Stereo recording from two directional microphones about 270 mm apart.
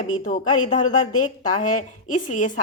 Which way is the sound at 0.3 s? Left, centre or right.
Left.